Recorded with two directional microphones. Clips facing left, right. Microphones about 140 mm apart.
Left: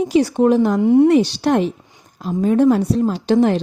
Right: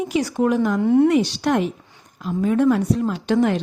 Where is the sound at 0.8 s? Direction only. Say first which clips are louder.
Left 3 dB; 15° left (ahead or behind).